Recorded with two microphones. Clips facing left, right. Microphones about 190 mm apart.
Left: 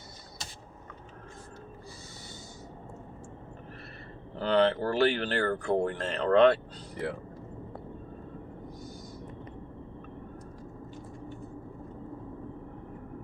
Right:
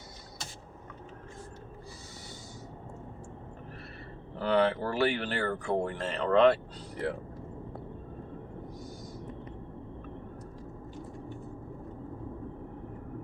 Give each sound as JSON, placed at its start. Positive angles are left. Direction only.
{"t": 4.4, "sound": "speech", "side_deg": -10}